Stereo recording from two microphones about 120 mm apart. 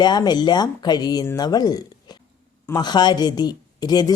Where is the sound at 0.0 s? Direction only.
35° left (ahead or behind).